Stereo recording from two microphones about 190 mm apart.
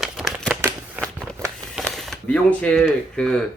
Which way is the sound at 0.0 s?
Centre (ahead or behind).